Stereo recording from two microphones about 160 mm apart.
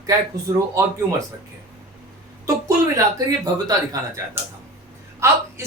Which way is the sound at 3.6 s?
20° right (ahead or behind).